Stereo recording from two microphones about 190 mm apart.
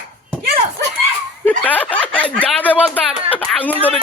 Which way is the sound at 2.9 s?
10° left (ahead or behind).